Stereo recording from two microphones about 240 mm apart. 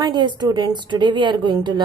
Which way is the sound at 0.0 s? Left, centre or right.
Centre.